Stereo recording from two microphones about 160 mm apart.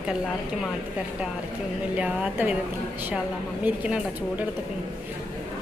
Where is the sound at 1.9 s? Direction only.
10° right (ahead or behind).